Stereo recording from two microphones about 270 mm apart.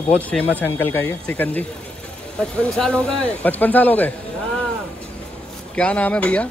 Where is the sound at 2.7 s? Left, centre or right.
Centre.